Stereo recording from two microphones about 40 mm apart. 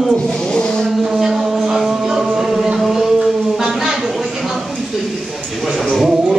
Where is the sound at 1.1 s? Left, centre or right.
Centre.